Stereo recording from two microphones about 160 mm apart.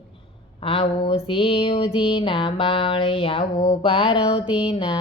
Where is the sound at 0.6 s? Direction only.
35° left (ahead or behind).